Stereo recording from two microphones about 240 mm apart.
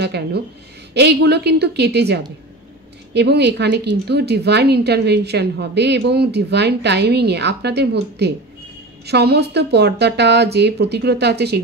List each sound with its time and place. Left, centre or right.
0.0 s speech: right